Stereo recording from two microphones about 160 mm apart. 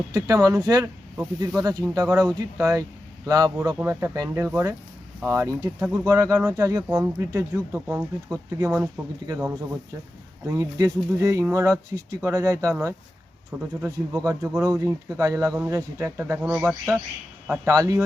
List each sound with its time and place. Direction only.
0.1 s speech: 20° right (ahead or behind)
16.4 s speech: 5° right (ahead or behind)
16.6 s speech: 15° right (ahead or behind)